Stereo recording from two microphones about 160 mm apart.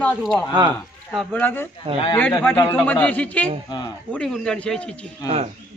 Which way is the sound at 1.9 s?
35° right (ahead or behind).